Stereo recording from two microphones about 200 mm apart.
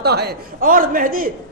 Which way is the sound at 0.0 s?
55° right (ahead or behind).